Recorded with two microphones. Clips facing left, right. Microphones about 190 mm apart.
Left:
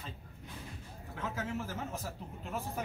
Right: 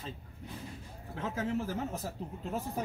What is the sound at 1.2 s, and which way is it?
Speech, 35° right (ahead or behind).